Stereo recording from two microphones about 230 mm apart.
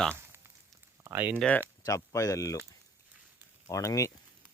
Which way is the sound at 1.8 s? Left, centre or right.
Centre.